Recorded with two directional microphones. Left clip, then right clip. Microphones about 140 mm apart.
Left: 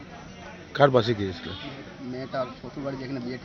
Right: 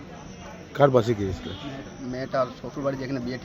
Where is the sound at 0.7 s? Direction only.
15° right (ahead or behind).